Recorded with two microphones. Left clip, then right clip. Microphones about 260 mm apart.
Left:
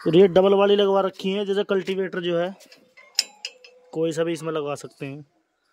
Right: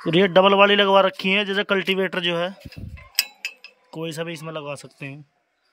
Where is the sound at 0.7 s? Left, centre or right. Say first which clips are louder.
Right 3 dB; right.